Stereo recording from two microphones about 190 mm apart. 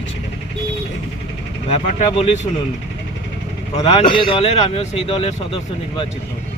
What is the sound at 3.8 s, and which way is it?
A man's voice, 25° left (ahead or behind).